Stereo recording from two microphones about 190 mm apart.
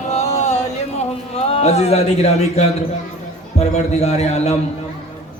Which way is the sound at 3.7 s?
35° left (ahead or behind).